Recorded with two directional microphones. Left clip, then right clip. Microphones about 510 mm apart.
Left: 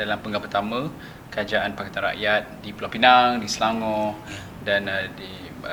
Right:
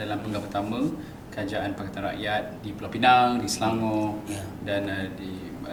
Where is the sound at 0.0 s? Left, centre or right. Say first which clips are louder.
Left 5 dB; left.